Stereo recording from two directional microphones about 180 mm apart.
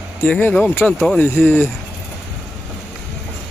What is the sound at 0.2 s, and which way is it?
Speech, 10° left (ahead or behind).